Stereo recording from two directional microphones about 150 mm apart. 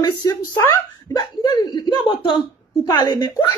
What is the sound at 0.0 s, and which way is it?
Speech, 25° left (ahead or behind).